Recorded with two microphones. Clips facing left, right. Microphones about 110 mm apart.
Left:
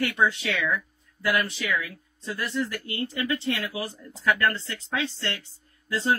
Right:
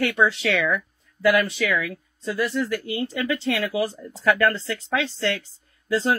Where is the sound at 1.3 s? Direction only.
90° right.